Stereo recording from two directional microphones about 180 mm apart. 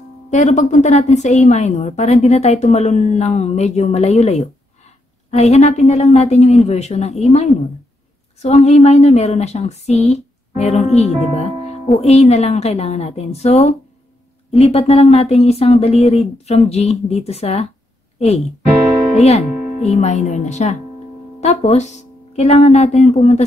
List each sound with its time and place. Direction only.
0.3 s speech: 40° left (ahead or behind)
8.4 s speech: 35° left (ahead or behind)
19.1 s speech: 35° left (ahead or behind)